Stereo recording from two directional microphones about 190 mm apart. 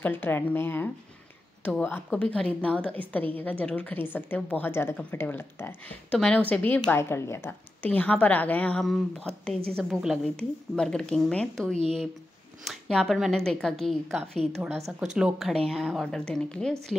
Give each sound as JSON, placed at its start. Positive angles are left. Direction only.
{"t": 0.0, "sound": "a woman's voice", "side_deg": 10}
{"t": 11.7, "sound": "speech", "side_deg": -35}
{"t": 12.6, "sound": "a woman's voice", "side_deg": 0}